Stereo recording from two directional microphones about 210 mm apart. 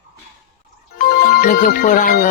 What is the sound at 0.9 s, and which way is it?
Music, 45° left (ahead or behind).